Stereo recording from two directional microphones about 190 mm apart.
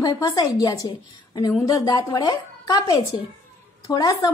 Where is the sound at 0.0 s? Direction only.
20° left (ahead or behind).